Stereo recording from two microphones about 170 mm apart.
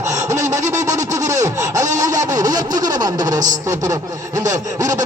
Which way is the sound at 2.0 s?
20° right (ahead or behind).